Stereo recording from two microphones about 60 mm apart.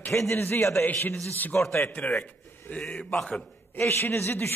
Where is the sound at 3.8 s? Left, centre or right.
Left.